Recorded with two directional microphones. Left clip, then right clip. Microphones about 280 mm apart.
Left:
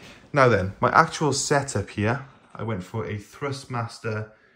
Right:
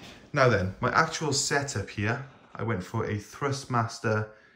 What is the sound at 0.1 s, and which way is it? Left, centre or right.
Speech, centre.